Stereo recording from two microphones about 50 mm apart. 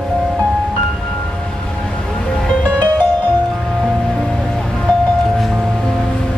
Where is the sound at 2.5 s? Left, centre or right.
Left.